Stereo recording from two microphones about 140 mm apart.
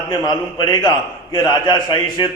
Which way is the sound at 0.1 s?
30° left (ahead or behind).